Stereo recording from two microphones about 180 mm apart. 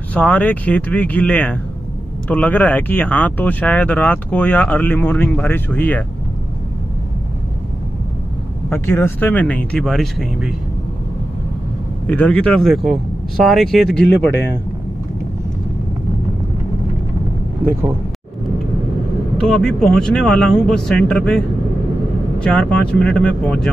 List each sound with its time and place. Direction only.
0.1 s speech: 10° left (ahead or behind)
8.6 s speech: 15° left (ahead or behind)
12.1 s speech: 5° left (ahead or behind)
19.3 s speech: 5° left (ahead or behind)
22.4 s speech: 5° left (ahead or behind)